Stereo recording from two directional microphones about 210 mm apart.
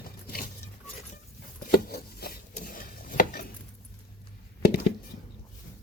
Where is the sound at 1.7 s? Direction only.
45° left (ahead or behind).